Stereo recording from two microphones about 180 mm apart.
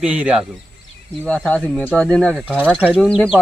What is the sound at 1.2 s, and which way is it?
Speech, 5° left (ahead or behind).